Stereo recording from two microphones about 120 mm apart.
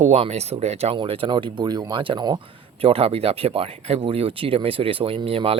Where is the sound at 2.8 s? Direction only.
55° right (ahead or behind).